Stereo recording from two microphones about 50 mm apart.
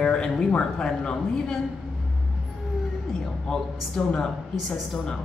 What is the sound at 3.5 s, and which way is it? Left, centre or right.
Speech, centre.